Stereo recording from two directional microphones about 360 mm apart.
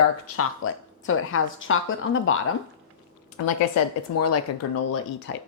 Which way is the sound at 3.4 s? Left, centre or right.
Left.